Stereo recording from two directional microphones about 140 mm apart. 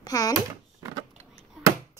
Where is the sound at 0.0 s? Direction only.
25° left (ahead or behind).